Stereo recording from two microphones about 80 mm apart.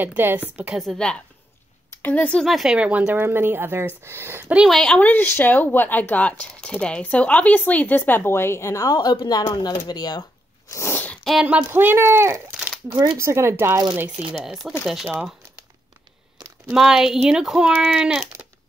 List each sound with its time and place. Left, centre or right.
0.0 s speech: right
0.7 s speech: centre
2.0 s speech: left
2.4 s speech: centre
2.7 s speech: centre
3.2 s speech: right
4.6 s speech: centre
5.0 s speech: left
10.7 s a sound: left
11.7 s speech: right
12.9 s speech: right
13.2 s speech: right
14.4 s speech: centre
16.7 s speech: centre